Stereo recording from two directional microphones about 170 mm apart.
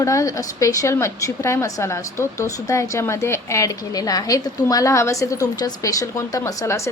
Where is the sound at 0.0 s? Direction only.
20° left (ahead or behind).